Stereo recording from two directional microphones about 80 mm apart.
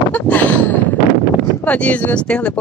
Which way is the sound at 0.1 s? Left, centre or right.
Left.